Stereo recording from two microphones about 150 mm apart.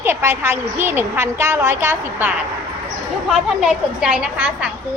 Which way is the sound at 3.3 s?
5° right (ahead or behind).